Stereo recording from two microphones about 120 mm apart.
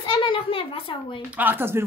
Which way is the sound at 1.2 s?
15° right (ahead or behind).